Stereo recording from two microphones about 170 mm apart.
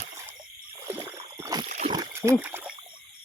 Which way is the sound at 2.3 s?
10° right (ahead or behind).